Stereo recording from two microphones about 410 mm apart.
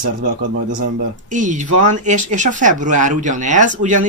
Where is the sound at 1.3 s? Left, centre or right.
Centre.